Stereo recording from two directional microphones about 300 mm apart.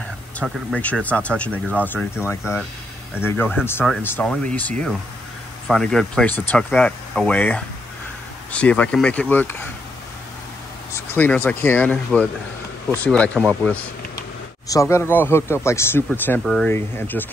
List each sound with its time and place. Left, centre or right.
0.4 s speech: centre
11.0 s speech: centre